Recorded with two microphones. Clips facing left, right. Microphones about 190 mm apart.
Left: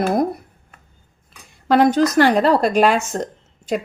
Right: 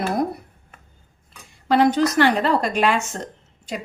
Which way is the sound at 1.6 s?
50° left (ahead or behind).